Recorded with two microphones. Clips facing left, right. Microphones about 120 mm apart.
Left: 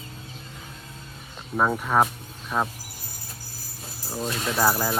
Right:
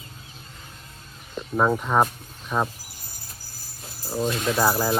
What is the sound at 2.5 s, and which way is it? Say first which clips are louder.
Speech: right 1 dB; 15° right (ahead or behind).